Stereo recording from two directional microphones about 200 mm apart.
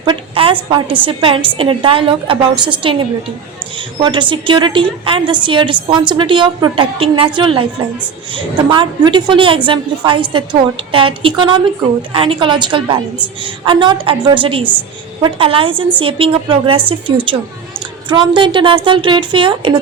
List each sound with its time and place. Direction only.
0.0 s a woman's voice: 25° right (ahead or behind)